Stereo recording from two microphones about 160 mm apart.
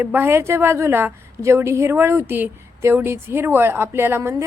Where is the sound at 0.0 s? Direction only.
10° right (ahead or behind).